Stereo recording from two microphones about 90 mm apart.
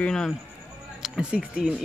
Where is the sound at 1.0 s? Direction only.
10° right (ahead or behind).